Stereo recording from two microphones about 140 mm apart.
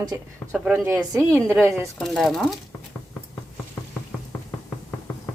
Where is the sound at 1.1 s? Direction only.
15° right (ahead or behind).